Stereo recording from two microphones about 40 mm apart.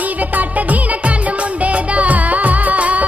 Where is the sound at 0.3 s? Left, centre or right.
Right.